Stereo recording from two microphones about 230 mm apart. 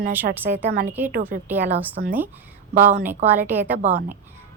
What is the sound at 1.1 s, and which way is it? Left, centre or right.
Speech, right.